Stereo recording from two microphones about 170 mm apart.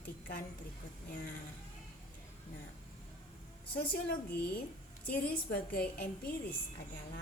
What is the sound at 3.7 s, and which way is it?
A woman's voice, 65° left (ahead or behind).